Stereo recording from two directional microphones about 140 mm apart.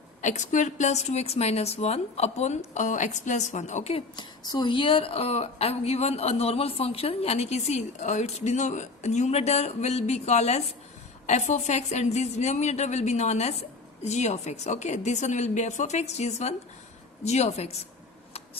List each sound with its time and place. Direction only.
0.2 s a woman's voice: 60° left (ahead or behind)
4.2 s a woman's voice: 30° left (ahead or behind); by 17.8 s 50° left (ahead or behind)